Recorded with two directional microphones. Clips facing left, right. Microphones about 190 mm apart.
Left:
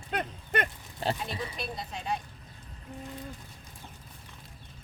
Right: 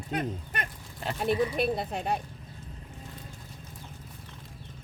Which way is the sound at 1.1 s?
55° right (ahead or behind).